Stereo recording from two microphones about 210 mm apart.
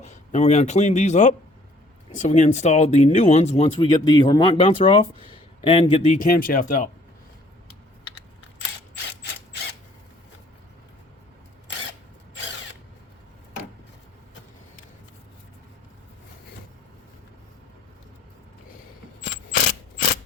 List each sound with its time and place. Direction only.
0.0 s speech: 35° left (ahead or behind)